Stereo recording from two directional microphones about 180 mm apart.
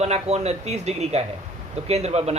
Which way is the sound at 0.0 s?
35° right (ahead or behind).